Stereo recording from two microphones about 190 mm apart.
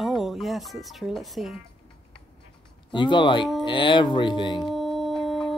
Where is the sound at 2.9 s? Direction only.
25° left (ahead or behind).